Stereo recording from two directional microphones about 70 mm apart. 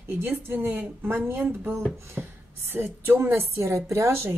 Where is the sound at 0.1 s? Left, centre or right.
Right.